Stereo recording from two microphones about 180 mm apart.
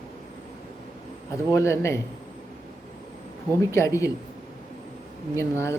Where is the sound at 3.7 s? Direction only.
15° left (ahead or behind).